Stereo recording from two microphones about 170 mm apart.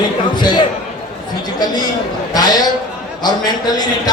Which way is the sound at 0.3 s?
25° left (ahead or behind).